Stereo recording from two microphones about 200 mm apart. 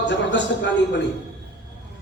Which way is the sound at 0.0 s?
60° left (ahead or behind).